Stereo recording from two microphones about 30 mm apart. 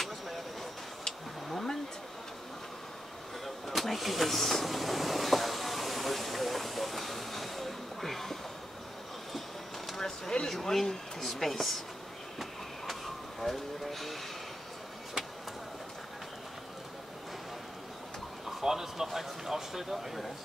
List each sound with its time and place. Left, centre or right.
1.5 s a sound: centre
3.4 s vehicle: centre
9.9 s a sound: centre
10.5 s speech: centre
12.4 s train: centre
18.6 s speech: centre